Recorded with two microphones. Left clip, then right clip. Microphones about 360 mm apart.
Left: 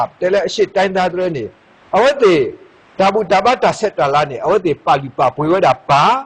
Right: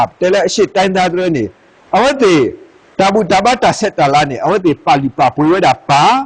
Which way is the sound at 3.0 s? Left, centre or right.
Right.